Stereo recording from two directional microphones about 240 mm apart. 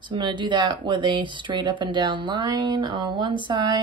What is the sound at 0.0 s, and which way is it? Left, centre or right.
Speech, centre.